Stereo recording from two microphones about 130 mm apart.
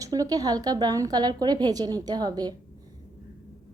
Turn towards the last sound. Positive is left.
turn(degrees=-30)  # may be behind; listen again after turning